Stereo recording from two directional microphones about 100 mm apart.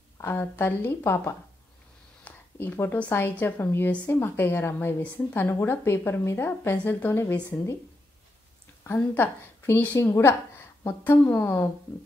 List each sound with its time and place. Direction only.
0.2 s a woman's voice: 20° left (ahead or behind)
8.8 s a woman's voice: 20° left (ahead or behind)